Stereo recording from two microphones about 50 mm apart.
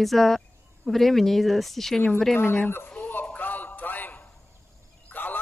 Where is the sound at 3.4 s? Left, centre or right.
Left.